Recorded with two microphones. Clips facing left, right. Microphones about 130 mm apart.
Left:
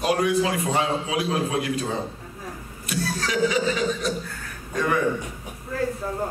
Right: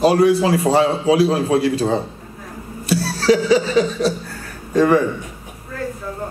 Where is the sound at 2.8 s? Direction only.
35° right (ahead or behind).